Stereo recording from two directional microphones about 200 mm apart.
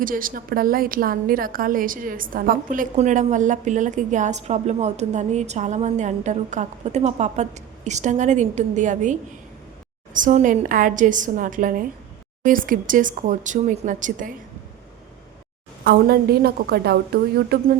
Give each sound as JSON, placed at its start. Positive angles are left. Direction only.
{"t": 0.0, "sound": "a woman's voice", "side_deg": -45}
{"t": 15.8, "sound": "a woman's voice", "side_deg": -55}